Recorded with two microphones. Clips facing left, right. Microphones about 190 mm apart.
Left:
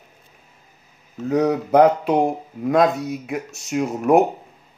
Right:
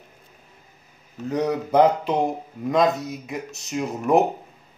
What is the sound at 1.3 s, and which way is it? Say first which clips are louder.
Speech: left 5 dB; 5° left (ahead or behind).